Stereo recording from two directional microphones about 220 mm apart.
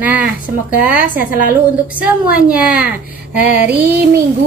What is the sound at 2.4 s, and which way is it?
Speech, 5° right (ahead or behind).